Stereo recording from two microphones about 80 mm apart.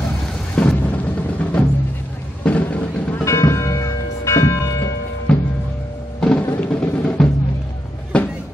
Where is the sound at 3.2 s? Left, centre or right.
Left.